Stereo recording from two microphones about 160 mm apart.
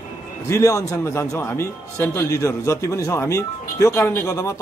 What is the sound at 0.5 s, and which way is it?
A man's voice, 20° left (ahead or behind).